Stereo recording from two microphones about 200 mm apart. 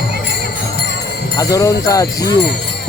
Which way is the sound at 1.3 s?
15° left (ahead or behind).